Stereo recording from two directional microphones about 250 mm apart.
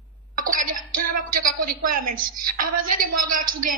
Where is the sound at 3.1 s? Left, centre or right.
Right.